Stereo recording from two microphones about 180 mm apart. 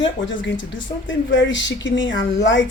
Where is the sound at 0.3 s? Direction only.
90° left.